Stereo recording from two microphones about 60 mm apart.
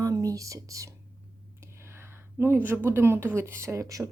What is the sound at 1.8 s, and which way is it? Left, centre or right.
Speech, right.